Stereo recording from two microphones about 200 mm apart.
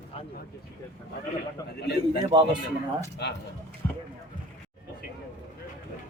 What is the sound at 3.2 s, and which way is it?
Speech, 60° left (ahead or behind).